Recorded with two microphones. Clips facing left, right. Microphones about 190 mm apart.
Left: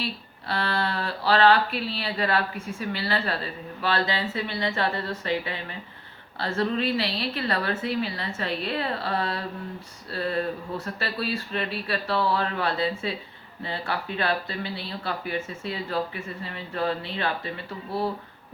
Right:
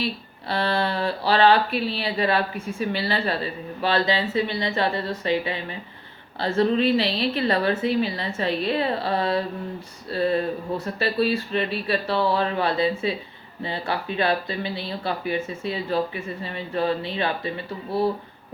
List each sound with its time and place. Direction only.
0.0 s speech: 15° right (ahead or behind)